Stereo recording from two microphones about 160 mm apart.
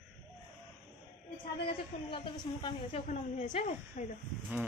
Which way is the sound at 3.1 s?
45° left (ahead or behind).